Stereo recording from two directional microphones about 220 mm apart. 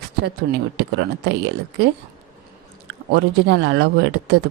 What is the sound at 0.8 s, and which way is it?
Speech, 50° right (ahead or behind).